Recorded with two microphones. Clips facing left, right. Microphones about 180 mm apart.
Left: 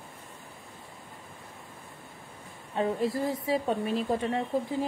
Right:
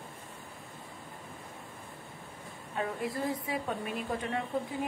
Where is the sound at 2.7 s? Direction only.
25° left (ahead or behind).